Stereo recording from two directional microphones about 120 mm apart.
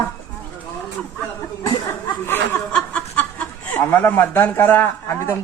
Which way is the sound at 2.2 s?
20° left (ahead or behind).